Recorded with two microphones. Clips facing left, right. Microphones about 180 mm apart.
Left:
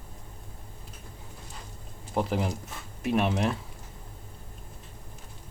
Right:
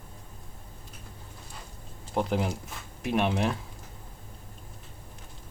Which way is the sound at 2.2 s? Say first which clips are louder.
Even; centre (ahead or behind).